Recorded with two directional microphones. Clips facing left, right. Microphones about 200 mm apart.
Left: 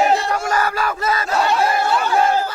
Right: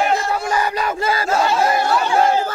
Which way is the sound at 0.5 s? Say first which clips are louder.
Even; 15° right (ahead or behind).